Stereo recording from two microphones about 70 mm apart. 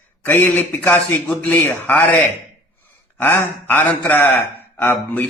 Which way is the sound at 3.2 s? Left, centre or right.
Left.